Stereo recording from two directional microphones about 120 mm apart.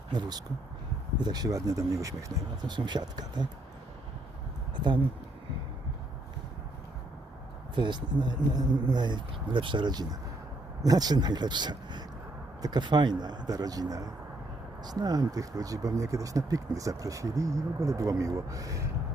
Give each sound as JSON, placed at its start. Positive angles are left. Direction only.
{"t": 0.1, "sound": "speech", "side_deg": -35}
{"t": 2.6, "sound": "speech", "side_deg": -40}
{"t": 7.8, "sound": "speech", "side_deg": -40}